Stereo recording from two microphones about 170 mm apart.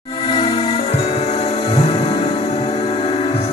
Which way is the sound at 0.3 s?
30° left (ahead or behind).